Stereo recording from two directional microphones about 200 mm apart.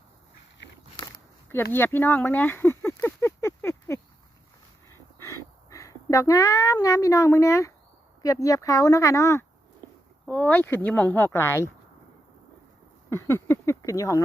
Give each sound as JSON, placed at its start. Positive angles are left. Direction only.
{"t": 1.7, "sound": "speech", "side_deg": 10}
{"t": 4.9, "sound": "dog", "side_deg": 15}
{"t": 5.7, "sound": "speech", "side_deg": 15}
{"t": 13.1, "sound": "speech", "side_deg": 15}